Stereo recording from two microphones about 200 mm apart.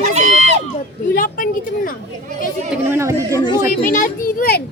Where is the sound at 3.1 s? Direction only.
20° left (ahead or behind).